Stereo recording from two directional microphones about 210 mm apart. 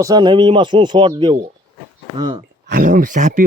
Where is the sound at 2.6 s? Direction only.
45° right (ahead or behind).